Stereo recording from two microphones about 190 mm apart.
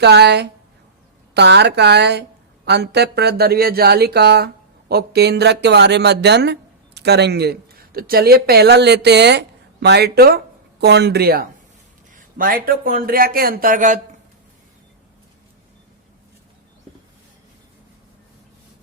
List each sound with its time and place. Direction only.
0.0 s a woman's voice: 60° right (ahead or behind); by 14.0 s 40° right (ahead or behind)